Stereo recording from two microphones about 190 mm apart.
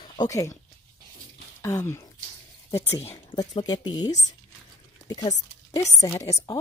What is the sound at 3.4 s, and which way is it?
Speech, 20° left (ahead or behind).